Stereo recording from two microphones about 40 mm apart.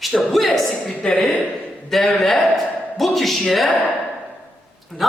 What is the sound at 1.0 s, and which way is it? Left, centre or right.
Speech, left.